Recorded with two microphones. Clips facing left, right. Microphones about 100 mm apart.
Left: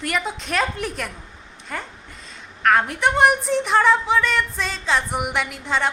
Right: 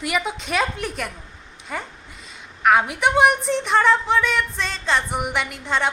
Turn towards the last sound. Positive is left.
turn(degrees=0)  # may be behind; listen again after turning